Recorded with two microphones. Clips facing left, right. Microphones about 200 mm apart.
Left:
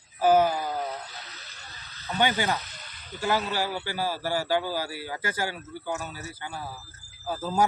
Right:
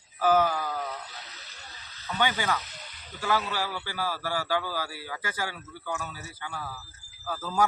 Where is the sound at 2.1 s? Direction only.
25° left (ahead or behind).